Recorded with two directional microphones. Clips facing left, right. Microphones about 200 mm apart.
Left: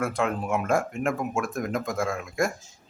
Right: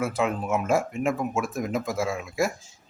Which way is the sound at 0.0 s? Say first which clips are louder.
Right 1 dB; 5° right (ahead or behind).